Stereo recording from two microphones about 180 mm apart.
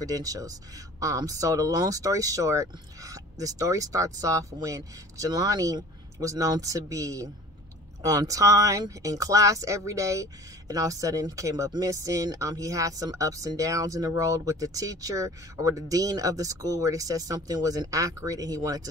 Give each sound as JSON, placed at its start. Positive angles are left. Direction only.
{"t": 0.0, "sound": "speech", "side_deg": -20}